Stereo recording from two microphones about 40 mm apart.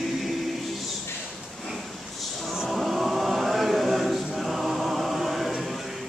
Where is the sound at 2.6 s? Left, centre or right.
Centre.